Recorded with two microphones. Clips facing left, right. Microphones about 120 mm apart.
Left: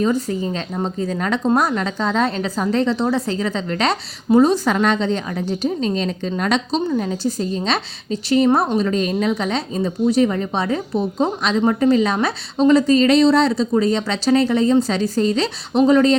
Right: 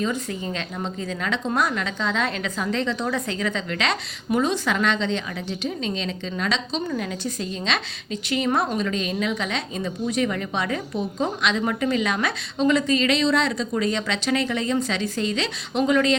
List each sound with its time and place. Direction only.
0.0 s speech: 35° left (ahead or behind)